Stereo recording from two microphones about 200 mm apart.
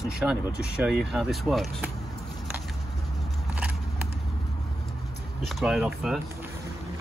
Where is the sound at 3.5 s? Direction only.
5° right (ahead or behind).